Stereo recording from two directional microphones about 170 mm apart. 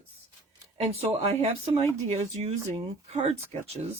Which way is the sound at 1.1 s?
40° right (ahead or behind).